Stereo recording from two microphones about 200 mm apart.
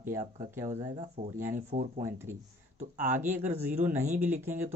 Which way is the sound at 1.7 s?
40° right (ahead or behind).